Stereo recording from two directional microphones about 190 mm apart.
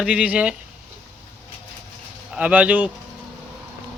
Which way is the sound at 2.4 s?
5° right (ahead or behind).